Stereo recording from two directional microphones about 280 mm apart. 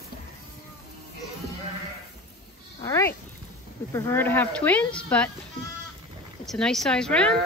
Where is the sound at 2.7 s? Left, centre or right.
Centre.